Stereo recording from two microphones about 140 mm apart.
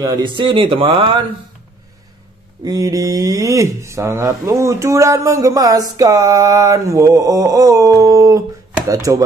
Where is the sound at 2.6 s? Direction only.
25° right (ahead or behind).